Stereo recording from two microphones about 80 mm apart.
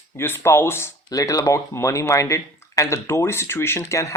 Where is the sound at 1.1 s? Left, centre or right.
Left.